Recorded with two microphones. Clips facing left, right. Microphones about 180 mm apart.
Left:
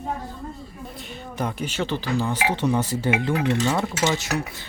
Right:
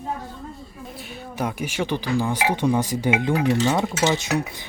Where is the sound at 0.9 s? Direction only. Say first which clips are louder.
Right 2 dB; 5° right (ahead or behind).